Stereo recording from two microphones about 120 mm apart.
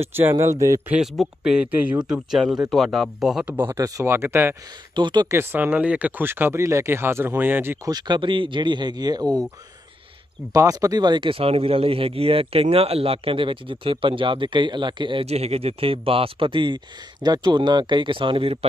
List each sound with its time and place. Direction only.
0.0 s speech: 20° right (ahead or behind)
0.8 s speech: 5° right (ahead or behind)
3.5 s speech: 20° right (ahead or behind)
4.9 s speech: 40° right (ahead or behind)
5.3 s speech: 20° right (ahead or behind)
7.9 s speech: 40° right (ahead or behind)
10.5 s speech: 30° right (ahead or behind)
15.2 s speech: 60° right (ahead or behind)